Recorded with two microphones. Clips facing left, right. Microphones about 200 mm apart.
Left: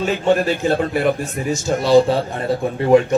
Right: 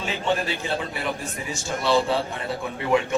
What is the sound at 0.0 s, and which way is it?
A man's voice, 45° left (ahead or behind).